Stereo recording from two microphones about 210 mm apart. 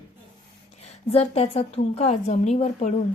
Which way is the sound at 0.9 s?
30° left (ahead or behind).